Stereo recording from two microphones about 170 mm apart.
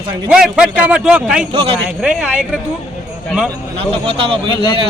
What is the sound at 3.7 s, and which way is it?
Speech, 35° right (ahead or behind).